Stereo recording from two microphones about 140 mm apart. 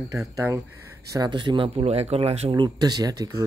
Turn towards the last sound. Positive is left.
turn(degrees=-25)  # may be behind; listen again after turning